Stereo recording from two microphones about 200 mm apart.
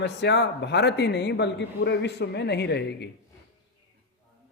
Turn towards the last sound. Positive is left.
turn(degrees=55)  # may be behind; listen again after turning